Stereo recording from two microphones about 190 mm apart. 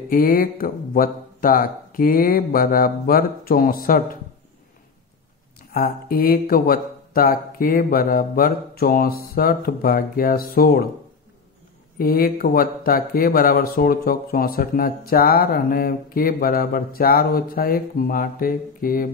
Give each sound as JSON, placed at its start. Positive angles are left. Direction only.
{"t": 0.1, "sound": "speech", "side_deg": 50}
{"t": 5.7, "sound": "speech", "side_deg": 50}
{"t": 12.0, "sound": "speech", "side_deg": 50}